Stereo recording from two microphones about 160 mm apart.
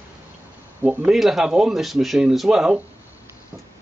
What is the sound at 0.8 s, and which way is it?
Speech, 10° right (ahead or behind).